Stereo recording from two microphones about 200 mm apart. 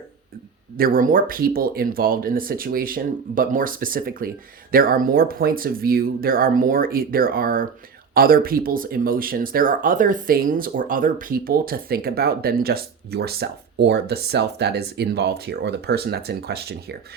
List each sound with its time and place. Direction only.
0.8 s speech: 45° right (ahead or behind)